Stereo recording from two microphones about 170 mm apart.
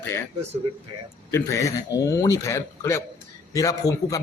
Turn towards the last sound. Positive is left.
turn(degrees=20)  # may be behind; listen again after turning